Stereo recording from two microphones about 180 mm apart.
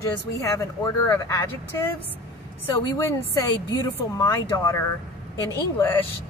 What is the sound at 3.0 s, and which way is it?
A woman's voice, 20° left (ahead or behind).